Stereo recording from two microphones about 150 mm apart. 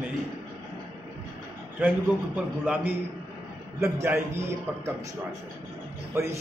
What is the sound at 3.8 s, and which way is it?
Speech, 15° right (ahead or behind).